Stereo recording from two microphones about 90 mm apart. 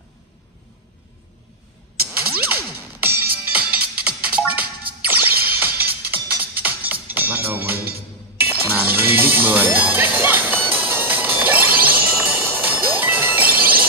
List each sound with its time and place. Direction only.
2.0 s music: 20° right (ahead or behind)
4.0 s music: 15° right (ahead or behind)